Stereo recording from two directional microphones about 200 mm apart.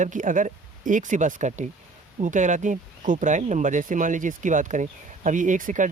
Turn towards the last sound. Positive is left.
turn(degrees=-40)  # may be behind; listen again after turning